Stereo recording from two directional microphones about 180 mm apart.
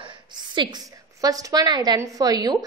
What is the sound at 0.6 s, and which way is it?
A woman's voice, 25° right (ahead or behind).